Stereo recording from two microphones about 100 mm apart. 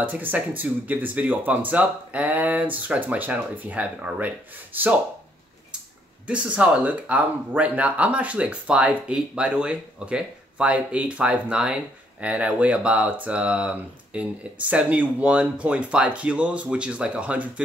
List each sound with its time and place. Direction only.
0.0 s speech: 15° right (ahead or behind)
6.2 s speech: 10° right (ahead or behind)